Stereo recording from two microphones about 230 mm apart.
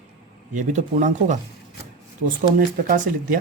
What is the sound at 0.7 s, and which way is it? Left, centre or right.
Speech, right.